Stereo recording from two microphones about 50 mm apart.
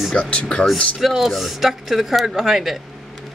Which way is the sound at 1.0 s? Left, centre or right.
Centre.